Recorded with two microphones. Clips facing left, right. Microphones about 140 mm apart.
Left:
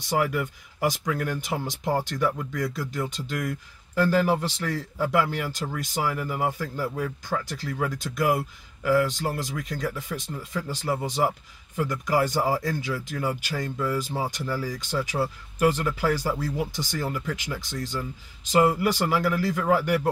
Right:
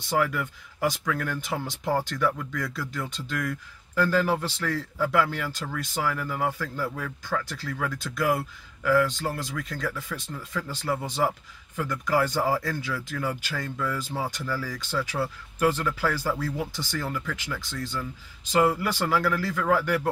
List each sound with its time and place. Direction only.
0.1 s speech: 15° left (ahead or behind)